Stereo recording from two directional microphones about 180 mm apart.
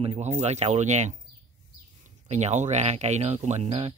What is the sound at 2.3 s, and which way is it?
Speech, 40° right (ahead or behind).